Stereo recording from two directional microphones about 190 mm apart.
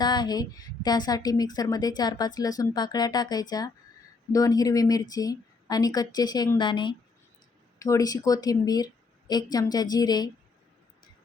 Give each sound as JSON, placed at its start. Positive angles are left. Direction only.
{"t": 0.0, "sound": "a woman's voice", "side_deg": 20}